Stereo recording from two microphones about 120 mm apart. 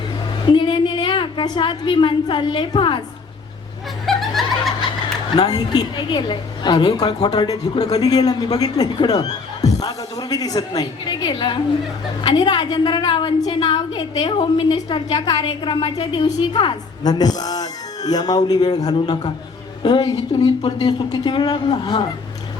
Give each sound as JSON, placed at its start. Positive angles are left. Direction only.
{"t": 0.5, "sound": "a woman's voice", "side_deg": 40}
{"t": 4.0, "sound": "snicker", "side_deg": 0}
{"t": 5.4, "sound": "a woman's voice", "side_deg": 35}
{"t": 20.7, "sound": "a woman's voice", "side_deg": 35}